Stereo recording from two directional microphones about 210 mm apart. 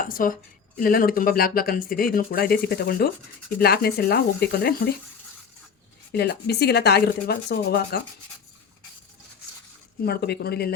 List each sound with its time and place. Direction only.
0.0 s speech: 40° left (ahead or behind)
6.1 s speech: 50° left (ahead or behind)
10.0 s speech: 50° left (ahead or behind)